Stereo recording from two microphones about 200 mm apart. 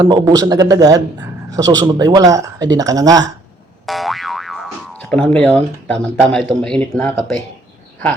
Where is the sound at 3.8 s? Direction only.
Centre (ahead or behind).